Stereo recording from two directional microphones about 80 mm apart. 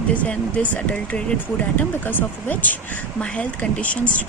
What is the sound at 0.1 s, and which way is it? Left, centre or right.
Speech, centre.